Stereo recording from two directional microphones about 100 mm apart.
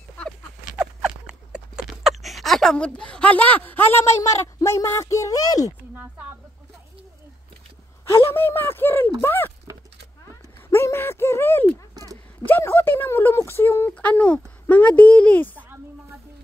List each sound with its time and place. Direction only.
0.7 s a sound: 5° right (ahead or behind)
2.2 s a woman's voice: centre (ahead or behind); by 5.8 s 40° left (ahead or behind)
8.0 s a woman's voice: 25° left (ahead or behind)
10.7 s speech: 30° left (ahead or behind)
11.9 s a sound: 40° right (ahead or behind)
12.4 s a woman's voice: 20° left (ahead or behind)
13.9 s speech: 15° left (ahead or behind)